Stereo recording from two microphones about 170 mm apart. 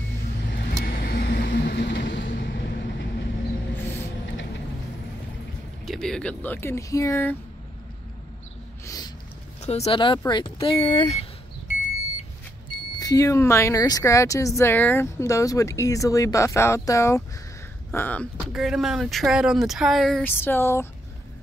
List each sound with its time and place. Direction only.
0.5 s vehicle: 65° left (ahead or behind); by 2.7 s 85° left
3.7 s a sound: 10° left (ahead or behind)
5.9 s speech: 5° left (ahead or behind)
8.8 s a sound: 20° left (ahead or behind)
9.6 s speech: 40° left (ahead or behind)
12.7 s smoke detector: 30° left (ahead or behind)
13.0 s speech: 20° left (ahead or behind)
18.5 s speech: centre (ahead or behind); by 20.9 s 15° left (ahead or behind)